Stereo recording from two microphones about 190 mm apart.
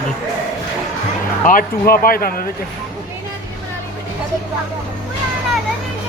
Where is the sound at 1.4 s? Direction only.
50° left (ahead or behind).